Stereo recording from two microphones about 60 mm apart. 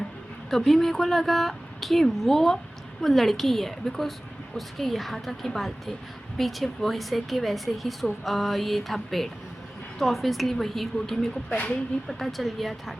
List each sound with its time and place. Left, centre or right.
0.5 s speech: centre
11.4 s speech: left
12.0 s speech: centre